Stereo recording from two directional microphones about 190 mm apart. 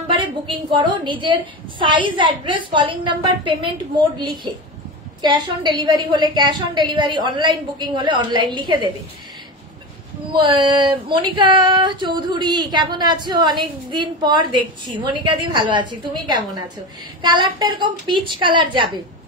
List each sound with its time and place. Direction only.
0.2 s speech: 25° right (ahead or behind)
5.2 s speech: 25° right (ahead or behind)
10.2 s speech: 25° right (ahead or behind)
17.2 s speech: 25° right (ahead or behind)